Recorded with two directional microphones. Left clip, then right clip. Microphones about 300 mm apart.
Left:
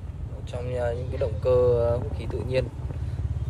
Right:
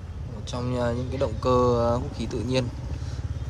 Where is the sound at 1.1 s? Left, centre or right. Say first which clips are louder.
Left 1 dB; right.